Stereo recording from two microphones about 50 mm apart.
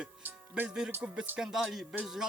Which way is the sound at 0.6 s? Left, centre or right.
Centre.